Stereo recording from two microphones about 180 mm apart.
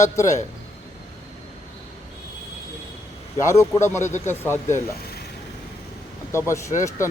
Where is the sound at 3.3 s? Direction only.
15° left (ahead or behind).